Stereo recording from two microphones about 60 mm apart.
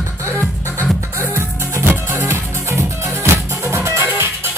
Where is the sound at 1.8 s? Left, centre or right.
Right.